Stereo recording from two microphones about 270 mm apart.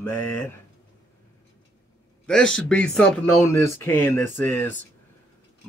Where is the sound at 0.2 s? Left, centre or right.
Left.